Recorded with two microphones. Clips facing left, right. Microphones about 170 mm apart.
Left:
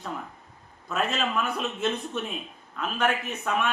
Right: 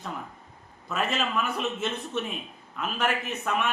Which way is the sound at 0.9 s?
Centre (ahead or behind).